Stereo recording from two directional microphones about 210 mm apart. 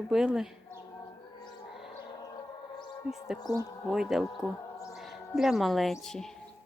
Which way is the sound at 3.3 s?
20° left (ahead or behind).